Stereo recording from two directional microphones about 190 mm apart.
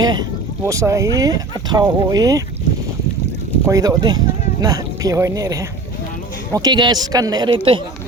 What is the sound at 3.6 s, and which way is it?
Speech, 20° right (ahead or behind).